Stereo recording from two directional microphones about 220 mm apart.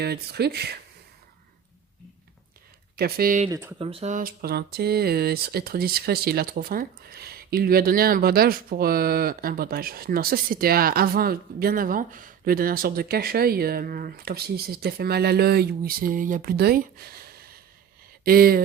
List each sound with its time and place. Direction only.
0.0 s speech: 45° right (ahead or behind)
2.9 s speech: 45° right (ahead or behind)
3.5 s speech: 15° right (ahead or behind)
3.8 s speech: 25° right (ahead or behind); by 18.6 s 40° right (ahead or behind)